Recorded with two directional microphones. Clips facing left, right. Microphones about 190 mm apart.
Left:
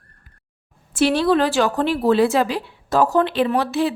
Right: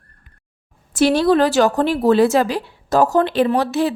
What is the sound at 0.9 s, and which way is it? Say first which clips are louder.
A woman's voice: right 3 dB; 40° right (ahead or behind).